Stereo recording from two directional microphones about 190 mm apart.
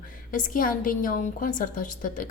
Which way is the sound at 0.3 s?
45° left (ahead or behind).